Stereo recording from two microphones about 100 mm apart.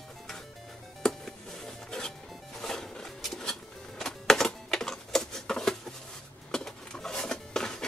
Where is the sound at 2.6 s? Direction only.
5° left (ahead or behind).